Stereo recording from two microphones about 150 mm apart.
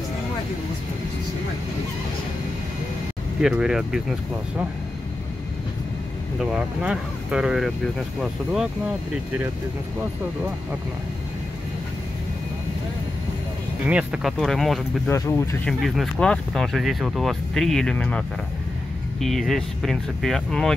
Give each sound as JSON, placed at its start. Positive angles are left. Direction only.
{"t": 3.3, "sound": "speech", "side_deg": -5}
{"t": 6.4, "sound": "speech", "side_deg": -5}
{"t": 13.8, "sound": "speech", "side_deg": -10}
{"t": 15.0, "sound": "speech", "side_deg": 15}
{"t": 15.8, "sound": "speech", "side_deg": 5}
{"t": 19.2, "sound": "speech", "side_deg": 0}